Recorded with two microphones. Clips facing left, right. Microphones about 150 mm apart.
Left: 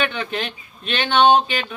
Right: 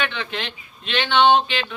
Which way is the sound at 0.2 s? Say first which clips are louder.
Left 3 dB; 45° left (ahead or behind).